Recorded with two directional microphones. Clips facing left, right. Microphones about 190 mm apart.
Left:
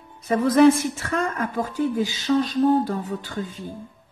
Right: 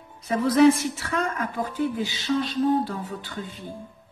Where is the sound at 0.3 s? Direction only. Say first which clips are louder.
Left 2 dB; 50° left (ahead or behind).